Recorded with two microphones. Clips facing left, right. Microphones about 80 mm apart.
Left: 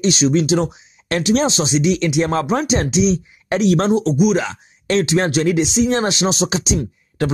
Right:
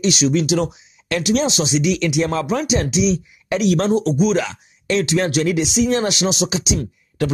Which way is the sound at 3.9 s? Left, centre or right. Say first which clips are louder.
Left 1 dB; left.